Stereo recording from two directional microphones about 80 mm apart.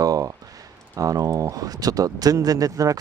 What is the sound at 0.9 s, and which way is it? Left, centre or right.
Speech, right.